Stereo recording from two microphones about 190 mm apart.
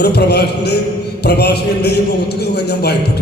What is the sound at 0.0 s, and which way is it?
A man's voice, 60° left (ahead or behind).